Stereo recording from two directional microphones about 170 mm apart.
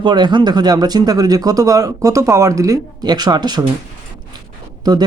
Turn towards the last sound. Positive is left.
turn(degrees=-25)  # may be behind; listen again after turning